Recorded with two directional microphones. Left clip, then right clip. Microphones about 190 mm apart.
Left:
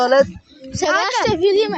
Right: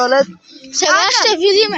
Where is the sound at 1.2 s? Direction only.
Centre (ahead or behind).